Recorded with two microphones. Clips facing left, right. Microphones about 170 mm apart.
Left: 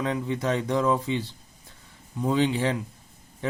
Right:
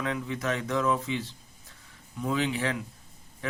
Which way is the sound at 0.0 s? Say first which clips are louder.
Left 4 dB; 30° left (ahead or behind).